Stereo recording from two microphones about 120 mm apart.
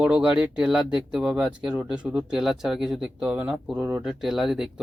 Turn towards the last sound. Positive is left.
turn(degrees=-5)  # may be behind; listen again after turning